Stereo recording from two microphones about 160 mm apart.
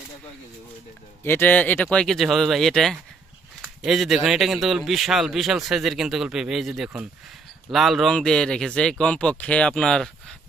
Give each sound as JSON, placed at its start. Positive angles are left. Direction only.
{"t": 1.2, "sound": "speech", "side_deg": 15}